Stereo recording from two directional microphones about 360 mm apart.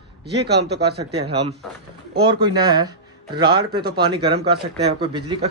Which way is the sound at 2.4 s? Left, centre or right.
Centre.